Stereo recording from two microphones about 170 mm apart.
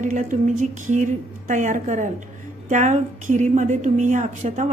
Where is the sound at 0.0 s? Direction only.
45° right (ahead or behind).